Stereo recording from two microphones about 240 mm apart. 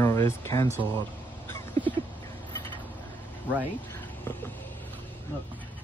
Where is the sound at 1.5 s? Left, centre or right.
Centre.